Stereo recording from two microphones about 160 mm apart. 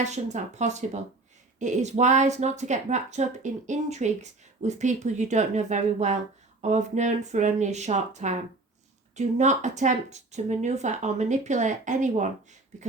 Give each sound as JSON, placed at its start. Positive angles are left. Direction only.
{"t": 0.0, "sound": "speech", "side_deg": -45}